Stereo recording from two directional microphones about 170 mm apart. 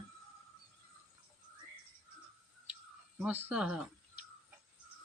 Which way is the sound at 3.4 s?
5° right (ahead or behind).